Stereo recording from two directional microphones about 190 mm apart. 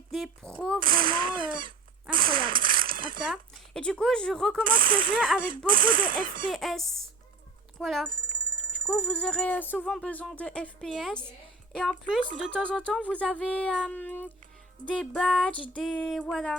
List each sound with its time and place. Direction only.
0.1 s speech: 5° left (ahead or behind)
1.1 s speech: 25° right (ahead or behind)
2.0 s a sound: 25° right (ahead or behind)
3.8 s speech: 5° left (ahead or behind)
4.8 s speech: 45° right (ahead or behind)
5.1 s speech: 5° right (ahead or behind)
5.4 s speech: 45° right (ahead or behind)
6.5 s speech: centre (ahead or behind)
8.1 s ringtone: 25° right (ahead or behind)
9.0 s speech: 5° left (ahead or behind)